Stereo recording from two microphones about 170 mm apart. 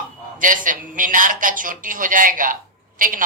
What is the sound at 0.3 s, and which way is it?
A man's voice, 50° right (ahead or behind).